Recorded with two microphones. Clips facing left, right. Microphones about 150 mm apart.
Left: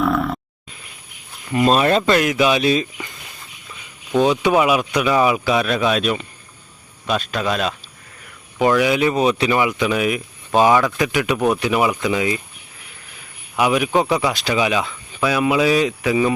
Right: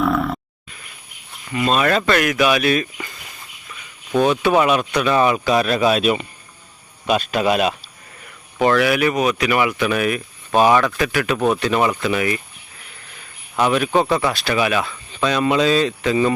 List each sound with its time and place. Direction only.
0.0 s a sound: centre (ahead or behind)
1.5 s speech: 35° left (ahead or behind)
4.2 s speech: 15° left (ahead or behind); by 7.8 s 10° right (ahead or behind)
8.5 s speech: 15° left (ahead or behind)
13.6 s speech: 10° left (ahead or behind)